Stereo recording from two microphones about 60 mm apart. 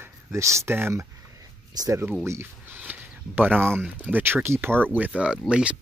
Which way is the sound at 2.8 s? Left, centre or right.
Right.